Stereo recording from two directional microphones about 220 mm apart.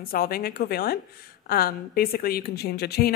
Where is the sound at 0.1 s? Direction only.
40° left (ahead or behind).